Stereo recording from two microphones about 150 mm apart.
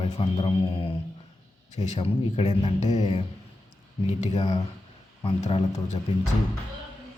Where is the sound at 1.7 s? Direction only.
50° left (ahead or behind).